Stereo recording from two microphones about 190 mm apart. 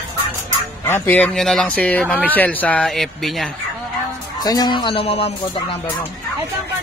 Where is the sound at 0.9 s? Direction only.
10° left (ahead or behind).